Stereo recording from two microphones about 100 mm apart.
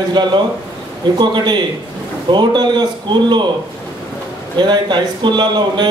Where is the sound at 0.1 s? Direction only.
50° right (ahead or behind).